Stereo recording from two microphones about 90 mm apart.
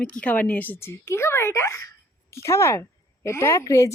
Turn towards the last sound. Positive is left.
turn(degrees=35)  # may be behind; listen again after turning